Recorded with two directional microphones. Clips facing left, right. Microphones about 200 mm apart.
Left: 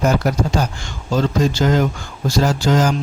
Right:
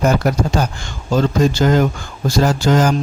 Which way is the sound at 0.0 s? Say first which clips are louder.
Right 1 dB; 55° right (ahead or behind).